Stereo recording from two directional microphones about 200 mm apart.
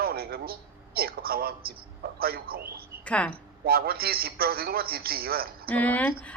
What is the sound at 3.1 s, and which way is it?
Speech, 5° left (ahead or behind).